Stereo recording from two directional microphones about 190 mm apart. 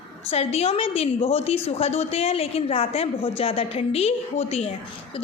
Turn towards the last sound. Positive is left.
turn(degrees=30)  # may be behind; listen again after turning